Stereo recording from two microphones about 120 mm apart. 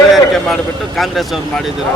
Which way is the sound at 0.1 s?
Centre (ahead or behind).